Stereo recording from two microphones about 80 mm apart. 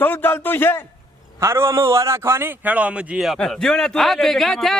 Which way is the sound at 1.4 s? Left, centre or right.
Right.